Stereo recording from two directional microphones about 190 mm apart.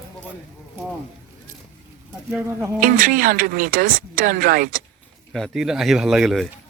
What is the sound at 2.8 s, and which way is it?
Speech, 45° right (ahead or behind).